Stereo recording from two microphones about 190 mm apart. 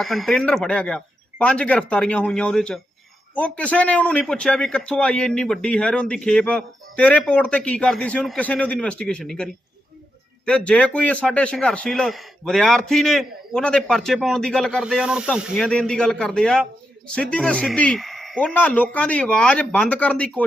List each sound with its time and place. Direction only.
0.0 s a man's voice: centre (ahead or behind)